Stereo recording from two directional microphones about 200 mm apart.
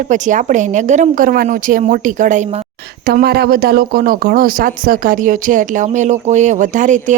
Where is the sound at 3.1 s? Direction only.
50° right (ahead or behind).